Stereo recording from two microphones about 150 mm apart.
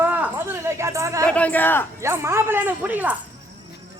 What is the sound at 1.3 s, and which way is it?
Speech, 10° left (ahead or behind).